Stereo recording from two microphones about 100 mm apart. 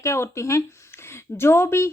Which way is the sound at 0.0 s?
30° left (ahead or behind).